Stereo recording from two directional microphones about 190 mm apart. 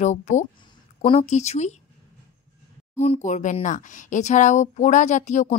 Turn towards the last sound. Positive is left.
turn(degrees=40)  # may be behind; listen again after turning